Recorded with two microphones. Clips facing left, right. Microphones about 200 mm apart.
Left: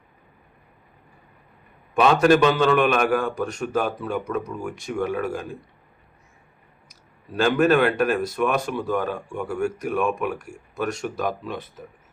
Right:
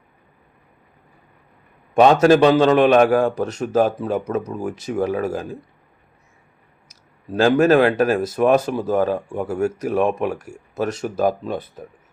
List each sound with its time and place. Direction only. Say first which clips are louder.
2.2 s speech: right 4 dB; 35° right (ahead or behind)
7.4 s speech: right 4 dB; 40° right (ahead or behind)